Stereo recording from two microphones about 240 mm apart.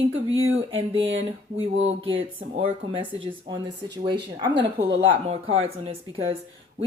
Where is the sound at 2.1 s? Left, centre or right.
Right.